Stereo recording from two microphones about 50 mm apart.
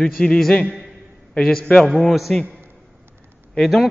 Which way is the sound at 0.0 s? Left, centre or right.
Centre.